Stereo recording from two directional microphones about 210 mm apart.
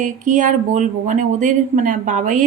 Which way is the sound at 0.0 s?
35° right (ahead or behind).